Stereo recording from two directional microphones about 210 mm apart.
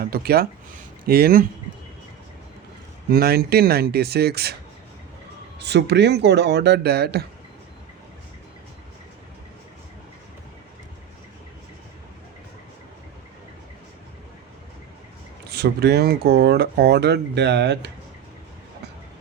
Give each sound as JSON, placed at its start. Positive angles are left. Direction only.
{"t": 0.0, "sound": "speech", "side_deg": -45}
{"t": 3.1, "sound": "speech", "side_deg": -45}
{"t": 5.5, "sound": "speech", "side_deg": -55}
{"t": 15.4, "sound": "speech", "side_deg": -50}